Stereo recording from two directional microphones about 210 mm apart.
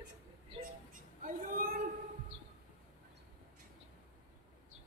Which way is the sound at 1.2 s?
40° right (ahead or behind).